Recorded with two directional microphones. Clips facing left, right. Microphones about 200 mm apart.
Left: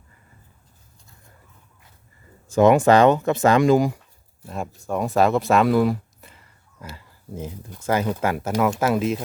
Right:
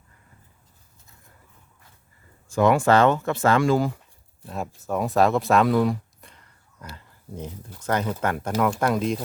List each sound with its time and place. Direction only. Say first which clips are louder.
2.5 s speech: left 4 dB; 20° left (ahead or behind)
4.4 s speech: left 1 dB; centre (ahead or behind)